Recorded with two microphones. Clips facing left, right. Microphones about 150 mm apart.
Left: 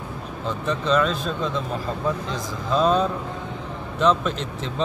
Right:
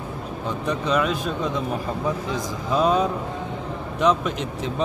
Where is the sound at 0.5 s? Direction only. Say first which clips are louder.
Left 1 dB; 10° right (ahead or behind).